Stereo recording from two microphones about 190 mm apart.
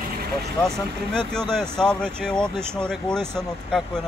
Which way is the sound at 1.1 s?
5° left (ahead or behind).